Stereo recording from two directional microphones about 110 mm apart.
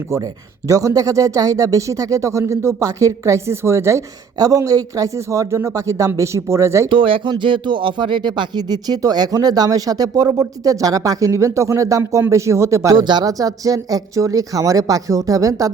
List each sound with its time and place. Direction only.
0.7 s speech: 30° right (ahead or behind)
6.9 s speech: 50° right (ahead or behind); by 13.0 s 30° right (ahead or behind)
13.0 s speech: 40° right (ahead or behind)